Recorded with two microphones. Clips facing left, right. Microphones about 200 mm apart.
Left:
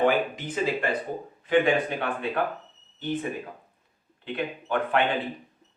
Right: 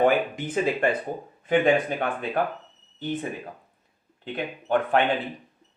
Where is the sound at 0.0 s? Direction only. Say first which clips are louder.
Right 2 dB; 50° right (ahead or behind).